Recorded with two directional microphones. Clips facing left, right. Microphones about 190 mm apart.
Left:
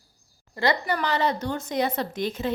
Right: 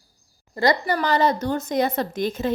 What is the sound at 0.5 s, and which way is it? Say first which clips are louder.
A woman's voice: right 4 dB; 40° right (ahead or behind).